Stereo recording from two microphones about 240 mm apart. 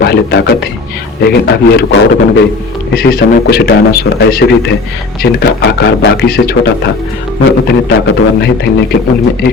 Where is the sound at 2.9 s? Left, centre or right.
Left.